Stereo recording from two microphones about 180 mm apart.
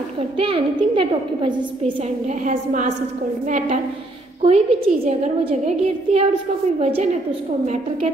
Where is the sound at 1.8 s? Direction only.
40° right (ahead or behind).